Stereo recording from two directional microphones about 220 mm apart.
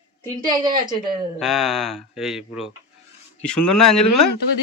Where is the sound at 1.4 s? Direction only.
Centre (ahead or behind).